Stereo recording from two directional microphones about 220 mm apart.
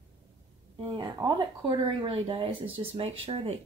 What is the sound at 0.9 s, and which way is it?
Speech, 20° right (ahead or behind).